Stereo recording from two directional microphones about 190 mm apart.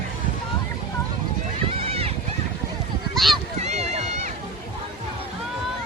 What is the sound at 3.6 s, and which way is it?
Run, 35° right (ahead or behind).